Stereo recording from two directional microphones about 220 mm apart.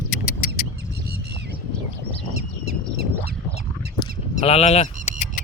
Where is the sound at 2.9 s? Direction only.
45° right (ahead or behind).